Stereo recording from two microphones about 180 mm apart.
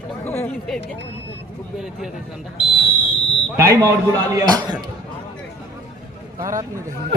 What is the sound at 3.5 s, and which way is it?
A man's voice, 15° right (ahead or behind).